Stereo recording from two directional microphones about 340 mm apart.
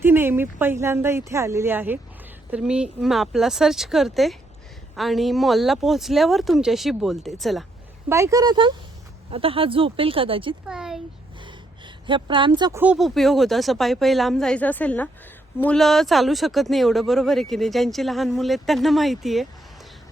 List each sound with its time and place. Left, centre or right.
0.0 s speech: centre
10.7 s speech: centre
12.0 s speech: centre